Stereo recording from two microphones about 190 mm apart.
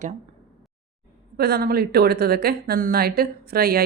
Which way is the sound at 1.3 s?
55° right (ahead or behind).